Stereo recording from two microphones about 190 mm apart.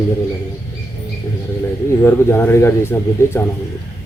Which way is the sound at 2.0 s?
15° left (ahead or behind).